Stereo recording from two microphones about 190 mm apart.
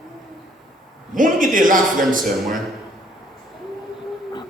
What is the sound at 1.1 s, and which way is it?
A man's voice, 45° right (ahead or behind).